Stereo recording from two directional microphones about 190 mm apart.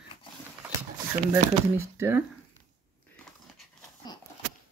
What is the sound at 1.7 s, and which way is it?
Speech, 10° right (ahead or behind).